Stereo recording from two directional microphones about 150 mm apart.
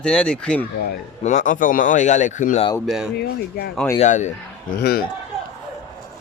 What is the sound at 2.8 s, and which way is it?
Speech, 5° right (ahead or behind).